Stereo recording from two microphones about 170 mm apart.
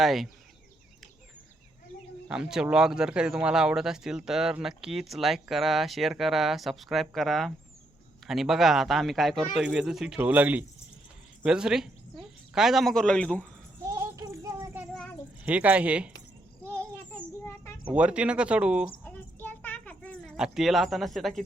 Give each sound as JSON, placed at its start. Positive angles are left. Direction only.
{"t": 0.0, "sound": "speech", "side_deg": 0}
{"t": 2.2, "sound": "speech", "side_deg": -5}
{"t": 13.8, "sound": "a sound", "side_deg": -20}
{"t": 15.4, "sound": "speech", "side_deg": -10}
{"t": 17.1, "sound": "children playing", "side_deg": 15}
{"t": 17.9, "sound": "speech", "side_deg": -5}
{"t": 19.0, "sound": "a sound", "side_deg": 10}
{"t": 20.3, "sound": "speech", "side_deg": -5}